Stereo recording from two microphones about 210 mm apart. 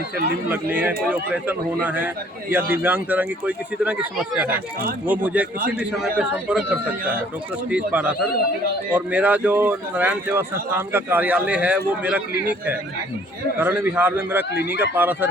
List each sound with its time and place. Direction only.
0.5 s a man's voice: 5° right (ahead or behind)
14.5 s speech: 50° left (ahead or behind)
14.9 s speech: 10° right (ahead or behind)